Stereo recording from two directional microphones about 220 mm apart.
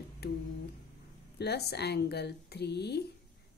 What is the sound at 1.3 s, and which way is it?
A woman's voice, 50° left (ahead or behind).